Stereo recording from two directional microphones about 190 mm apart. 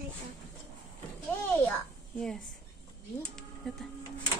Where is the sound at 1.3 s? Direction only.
10° left (ahead or behind).